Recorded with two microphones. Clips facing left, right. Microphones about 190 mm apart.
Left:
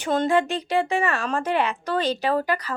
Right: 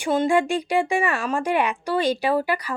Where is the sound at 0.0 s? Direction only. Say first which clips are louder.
Right 1 dB; 10° right (ahead or behind).